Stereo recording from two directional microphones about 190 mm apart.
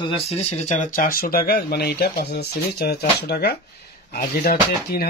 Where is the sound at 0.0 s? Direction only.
30° left (ahead or behind).